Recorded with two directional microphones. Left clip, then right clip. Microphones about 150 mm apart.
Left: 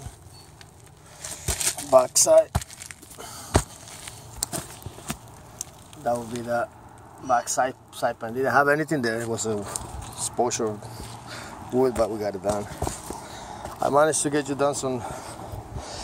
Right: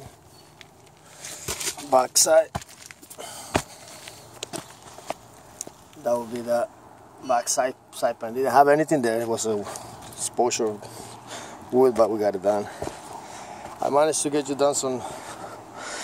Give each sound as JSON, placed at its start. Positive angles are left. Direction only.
{"t": 1.9, "sound": "speech", "side_deg": -25}
{"t": 3.2, "sound": "a sound", "side_deg": -20}
{"t": 6.0, "sound": "speech", "side_deg": -20}
{"t": 8.5, "sound": "speech", "side_deg": -25}
{"t": 13.5, "sound": "a sound", "side_deg": 0}
{"t": 14.4, "sound": "speech", "side_deg": -15}